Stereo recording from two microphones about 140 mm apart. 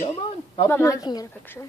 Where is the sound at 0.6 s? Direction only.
20° left (ahead or behind).